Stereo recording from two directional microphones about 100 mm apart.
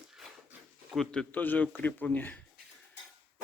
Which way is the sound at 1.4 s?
20° left (ahead or behind).